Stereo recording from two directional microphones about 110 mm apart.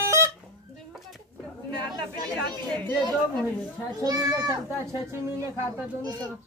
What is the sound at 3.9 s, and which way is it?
Speech, 35° right (ahead or behind).